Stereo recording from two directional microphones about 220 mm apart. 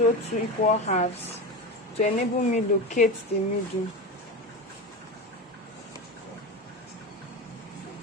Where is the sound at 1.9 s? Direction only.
30° left (ahead or behind).